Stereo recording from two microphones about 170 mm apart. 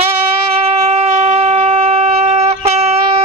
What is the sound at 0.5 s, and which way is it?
Shofar, 35° right (ahead or behind).